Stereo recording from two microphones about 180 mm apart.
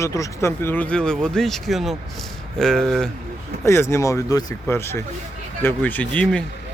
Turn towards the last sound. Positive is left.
turn(degrees=5)  # may be behind; listen again after turning